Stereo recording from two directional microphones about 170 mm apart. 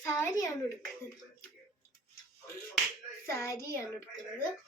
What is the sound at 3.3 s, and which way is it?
Speech, 15° left (ahead or behind).